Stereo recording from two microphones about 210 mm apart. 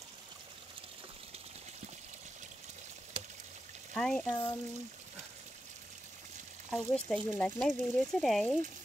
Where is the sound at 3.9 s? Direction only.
5° left (ahead or behind).